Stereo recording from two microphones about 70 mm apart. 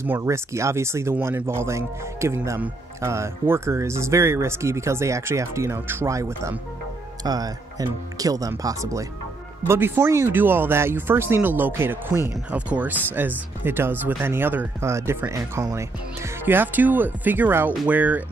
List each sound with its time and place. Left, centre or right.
0.2 s speech: right
6.0 s speech: right
7.2 s speech: right
9.7 s speech: right
12.4 s speech: centre
14.8 s speech: right
16.4 s speech: right